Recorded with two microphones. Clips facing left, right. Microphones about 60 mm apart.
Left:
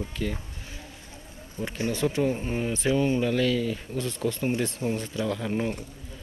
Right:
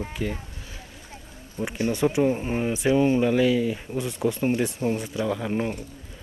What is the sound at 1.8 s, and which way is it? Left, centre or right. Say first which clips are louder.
Speech: right 4 dB; right.